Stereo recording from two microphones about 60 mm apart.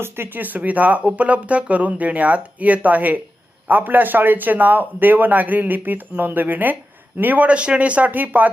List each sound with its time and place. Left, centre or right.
0.0 s a man's voice: right